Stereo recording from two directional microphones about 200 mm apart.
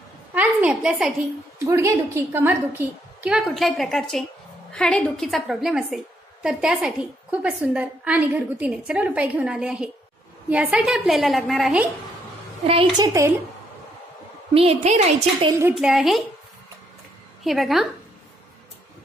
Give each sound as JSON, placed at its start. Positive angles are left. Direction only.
{"t": 0.3, "sound": "a sound", "side_deg": -10}
{"t": 1.7, "sound": "a woman's voice", "side_deg": -15}
{"t": 12.6, "sound": "a woman's voice", "side_deg": -25}
{"t": 14.5, "sound": "a woman's voice", "side_deg": -30}
{"t": 15.7, "sound": "a woman's voice", "side_deg": -5}
{"t": 17.4, "sound": "a woman's voice", "side_deg": 0}